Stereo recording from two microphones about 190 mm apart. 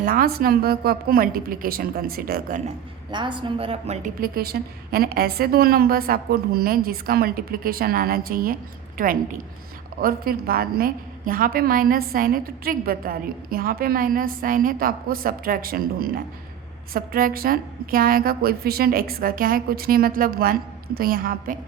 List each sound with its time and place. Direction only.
0.0 s a woman's voice: 50° right (ahead or behind)
3.1 s a woman's voice: 25° right (ahead or behind)
4.2 s a woman's voice: 55° right (ahead or behind)